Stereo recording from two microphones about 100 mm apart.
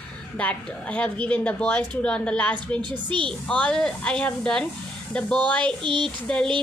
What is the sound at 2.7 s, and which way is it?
Speech, 50° right (ahead or behind).